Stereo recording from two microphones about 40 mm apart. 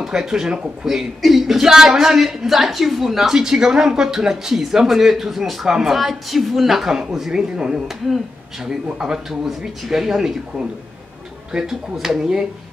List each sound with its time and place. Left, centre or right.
0.0 s a woman's voice: centre
7.9 s speech: centre
8.9 s speech: centre
11.5 s speech: centre